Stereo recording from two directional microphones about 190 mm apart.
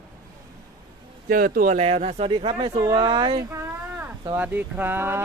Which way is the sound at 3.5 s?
15° right (ahead or behind).